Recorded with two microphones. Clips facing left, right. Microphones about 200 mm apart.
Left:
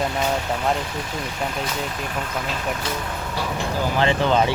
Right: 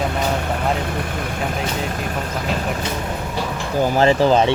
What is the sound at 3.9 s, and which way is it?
Speech, 40° right (ahead or behind).